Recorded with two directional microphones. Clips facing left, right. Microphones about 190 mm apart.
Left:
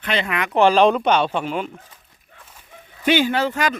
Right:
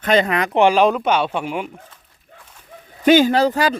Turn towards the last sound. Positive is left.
turn(degrees=-35)  # may be behind; listen again after turning